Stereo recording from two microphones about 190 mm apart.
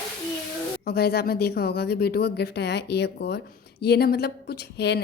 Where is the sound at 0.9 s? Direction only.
60° left (ahead or behind).